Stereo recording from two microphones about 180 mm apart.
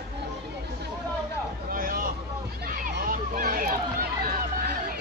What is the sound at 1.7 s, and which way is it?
Vehicle, 50° right (ahead or behind).